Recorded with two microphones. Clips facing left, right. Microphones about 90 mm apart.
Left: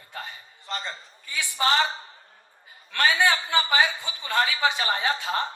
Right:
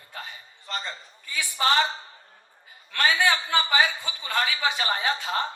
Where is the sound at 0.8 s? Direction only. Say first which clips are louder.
Even; 20° left (ahead or behind).